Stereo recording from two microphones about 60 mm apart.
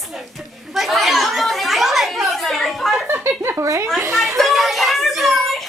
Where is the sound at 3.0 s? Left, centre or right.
Right.